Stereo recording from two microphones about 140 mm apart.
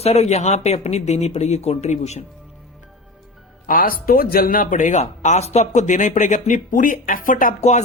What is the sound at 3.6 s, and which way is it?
Speech, 85° left.